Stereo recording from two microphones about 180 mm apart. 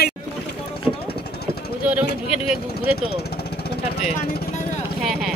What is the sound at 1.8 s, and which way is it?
Speech, 5° right (ahead or behind).